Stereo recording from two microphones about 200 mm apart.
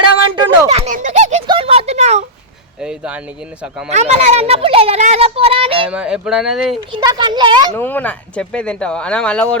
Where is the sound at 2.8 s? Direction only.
5° right (ahead or behind).